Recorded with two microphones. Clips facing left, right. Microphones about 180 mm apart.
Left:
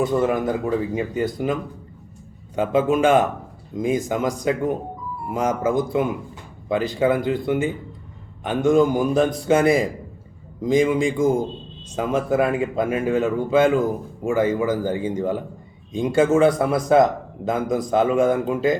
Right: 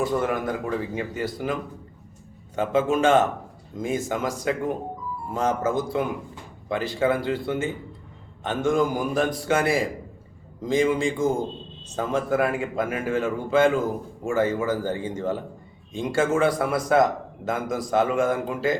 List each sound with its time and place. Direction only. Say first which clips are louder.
0.0 s speech: left 4 dB; 20° left (ahead or behind)
2.6 s speech: left 3 dB; 15° left (ahead or behind)